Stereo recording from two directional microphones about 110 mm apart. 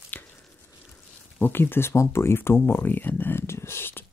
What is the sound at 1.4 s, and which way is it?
Speech, 20° left (ahead or behind).